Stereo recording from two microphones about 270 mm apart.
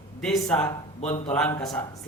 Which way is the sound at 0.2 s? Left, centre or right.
Centre.